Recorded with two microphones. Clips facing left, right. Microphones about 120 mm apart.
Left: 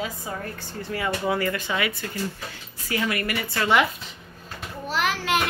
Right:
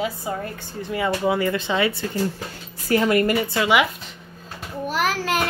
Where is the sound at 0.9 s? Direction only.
20° right (ahead or behind).